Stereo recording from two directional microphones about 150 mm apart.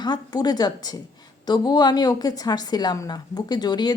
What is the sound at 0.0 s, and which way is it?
A woman's voice, 30° left (ahead or behind).